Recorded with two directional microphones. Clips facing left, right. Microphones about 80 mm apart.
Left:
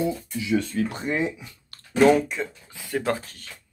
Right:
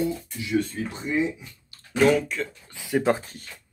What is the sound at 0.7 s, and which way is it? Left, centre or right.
Speech, left.